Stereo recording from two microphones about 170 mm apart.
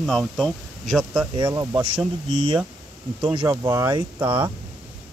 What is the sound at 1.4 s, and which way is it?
Speech, 20° right (ahead or behind).